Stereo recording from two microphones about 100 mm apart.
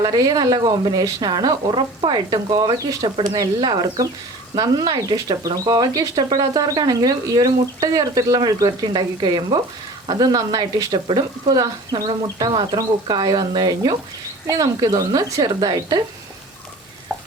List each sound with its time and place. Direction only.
0.0 s speech: 35° right (ahead or behind)